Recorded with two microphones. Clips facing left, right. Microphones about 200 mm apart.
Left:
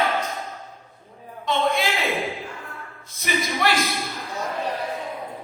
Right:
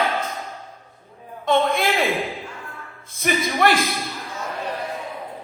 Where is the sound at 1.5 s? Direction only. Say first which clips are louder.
Right 3 dB; 50° right (ahead or behind).